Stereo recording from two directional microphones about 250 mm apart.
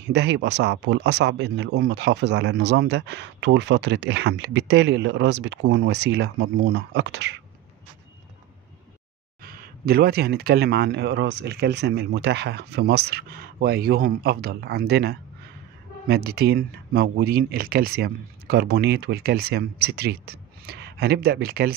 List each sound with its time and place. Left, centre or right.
0.1 s speech: right
9.4 s speech: right